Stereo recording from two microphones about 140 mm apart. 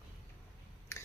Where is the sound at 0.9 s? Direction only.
20° left (ahead or behind).